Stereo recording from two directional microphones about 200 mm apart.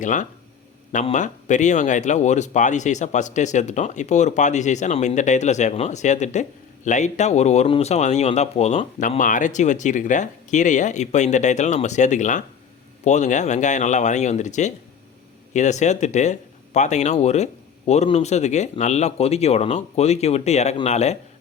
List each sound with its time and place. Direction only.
0.0 s speech: 40° left (ahead or behind)